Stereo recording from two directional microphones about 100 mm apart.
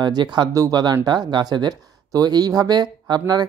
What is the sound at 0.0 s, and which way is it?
Speech, 45° right (ahead or behind).